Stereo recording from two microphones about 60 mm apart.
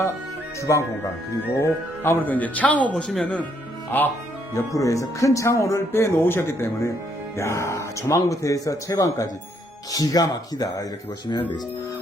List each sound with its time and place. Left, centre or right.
0.7 s speech: left
2.2 s speech: left
2.9 s speech: centre
3.9 s speech: left
4.5 s speech: left
9.9 s speech: left